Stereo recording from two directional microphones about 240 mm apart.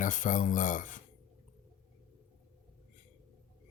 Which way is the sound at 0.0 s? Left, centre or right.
Left.